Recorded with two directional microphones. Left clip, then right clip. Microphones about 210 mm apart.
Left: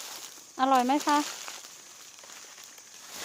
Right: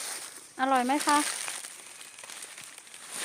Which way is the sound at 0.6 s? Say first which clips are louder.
Left 2 dB; 20° left (ahead or behind).